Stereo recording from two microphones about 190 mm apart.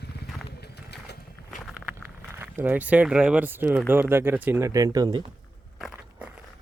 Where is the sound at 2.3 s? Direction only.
10° right (ahead or behind).